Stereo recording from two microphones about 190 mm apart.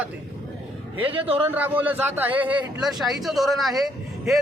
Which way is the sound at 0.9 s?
30° right (ahead or behind).